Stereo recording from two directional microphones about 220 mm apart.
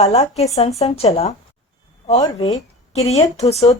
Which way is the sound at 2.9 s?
30° left (ahead or behind).